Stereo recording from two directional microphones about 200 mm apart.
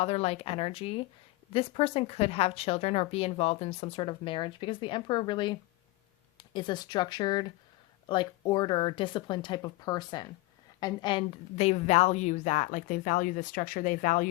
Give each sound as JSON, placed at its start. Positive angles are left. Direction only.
{"t": 0.0, "sound": "a woman's voice", "side_deg": 30}